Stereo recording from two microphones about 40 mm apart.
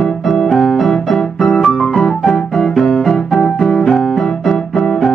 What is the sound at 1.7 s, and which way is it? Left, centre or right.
Music, centre.